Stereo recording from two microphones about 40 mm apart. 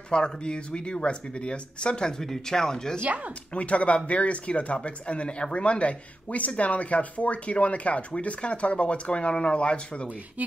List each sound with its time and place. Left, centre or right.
0.1 s speech: left
3.5 s speech: left